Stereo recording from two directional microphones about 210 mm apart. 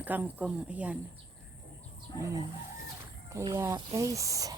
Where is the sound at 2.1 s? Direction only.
20° left (ahead or behind).